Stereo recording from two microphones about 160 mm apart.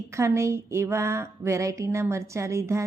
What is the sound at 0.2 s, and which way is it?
A woman's voice, 15° right (ahead or behind).